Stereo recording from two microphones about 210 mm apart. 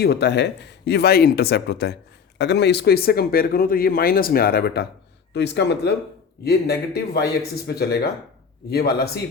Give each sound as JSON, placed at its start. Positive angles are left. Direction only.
{"t": 0.0, "sound": "speech", "side_deg": 50}